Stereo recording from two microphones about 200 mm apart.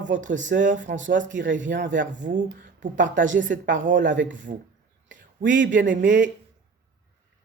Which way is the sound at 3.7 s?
40° right (ahead or behind).